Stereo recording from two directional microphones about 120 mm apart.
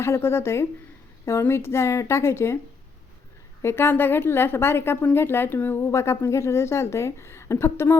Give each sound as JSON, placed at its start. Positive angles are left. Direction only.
{"t": 0.0, "sound": "a woman's voice", "side_deg": 20}
{"t": 3.6, "sound": "a woman's voice", "side_deg": 20}